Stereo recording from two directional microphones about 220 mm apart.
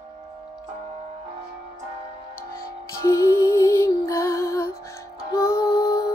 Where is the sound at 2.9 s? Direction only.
15° left (ahead or behind).